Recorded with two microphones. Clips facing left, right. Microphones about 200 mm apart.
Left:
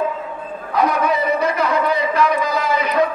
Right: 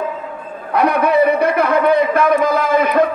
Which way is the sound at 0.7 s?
60° right (ahead or behind).